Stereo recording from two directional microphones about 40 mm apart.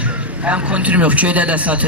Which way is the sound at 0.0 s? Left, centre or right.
Right.